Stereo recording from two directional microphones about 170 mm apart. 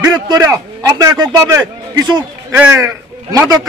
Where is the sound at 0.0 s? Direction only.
20° right (ahead or behind).